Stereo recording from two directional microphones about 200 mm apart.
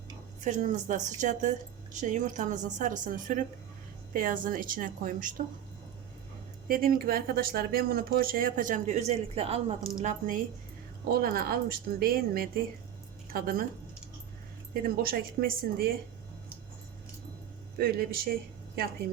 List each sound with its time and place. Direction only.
0.4 s a woman's voice: 40° right (ahead or behind)
6.7 s a woman's voice: 45° right (ahead or behind)
14.7 s speech: 45° right (ahead or behind)
17.7 s speech: 50° right (ahead or behind)